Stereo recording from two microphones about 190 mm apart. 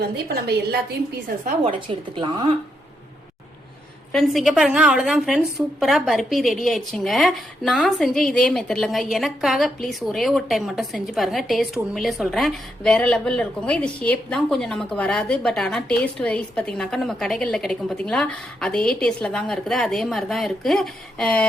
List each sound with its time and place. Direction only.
0.0 s a woman's voice: 55° right (ahead or behind)
1.6 s speech: 25° right (ahead or behind)
4.1 s a woman's voice: centre (ahead or behind)